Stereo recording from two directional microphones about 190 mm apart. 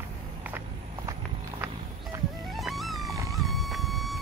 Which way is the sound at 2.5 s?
Centre (ahead or behind).